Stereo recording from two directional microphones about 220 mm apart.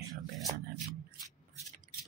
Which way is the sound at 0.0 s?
Centre (ahead or behind).